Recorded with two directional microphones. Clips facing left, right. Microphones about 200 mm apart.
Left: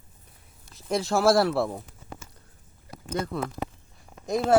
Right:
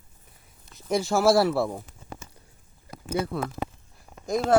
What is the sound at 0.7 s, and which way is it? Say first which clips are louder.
Speech: right 1 dB; centre (ahead or behind).